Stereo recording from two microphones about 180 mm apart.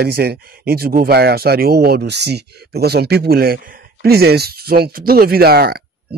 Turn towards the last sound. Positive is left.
turn(degrees=-60)  # may be behind; listen again after turning